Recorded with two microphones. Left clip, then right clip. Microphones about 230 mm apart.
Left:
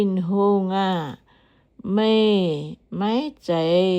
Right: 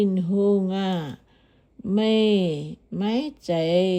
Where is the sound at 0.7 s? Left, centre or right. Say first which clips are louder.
Left 5 dB; centre.